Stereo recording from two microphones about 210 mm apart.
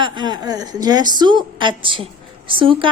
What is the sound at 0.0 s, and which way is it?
A woman's voice, 20° right (ahead or behind).